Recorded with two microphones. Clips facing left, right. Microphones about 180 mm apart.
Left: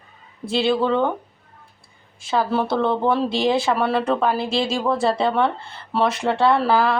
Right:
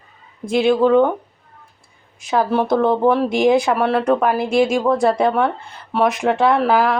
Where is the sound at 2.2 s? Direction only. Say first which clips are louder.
Right 3 dB; 15° right (ahead or behind).